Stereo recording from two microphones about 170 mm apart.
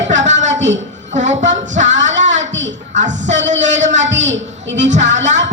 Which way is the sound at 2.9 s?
45° right (ahead or behind).